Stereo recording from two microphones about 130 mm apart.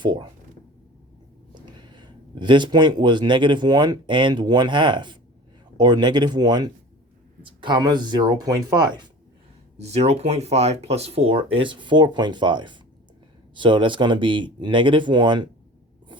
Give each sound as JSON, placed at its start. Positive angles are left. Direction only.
{"t": 0.0, "sound": "speech", "side_deg": -35}
{"t": 1.5, "sound": "speech", "side_deg": -35}
{"t": 9.7, "sound": "speech", "side_deg": -55}